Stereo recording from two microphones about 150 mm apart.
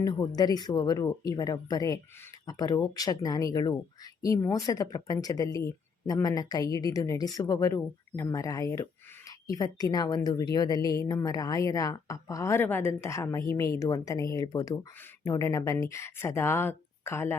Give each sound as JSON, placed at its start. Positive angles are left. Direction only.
{"t": 0.0, "sound": "speech", "side_deg": 25}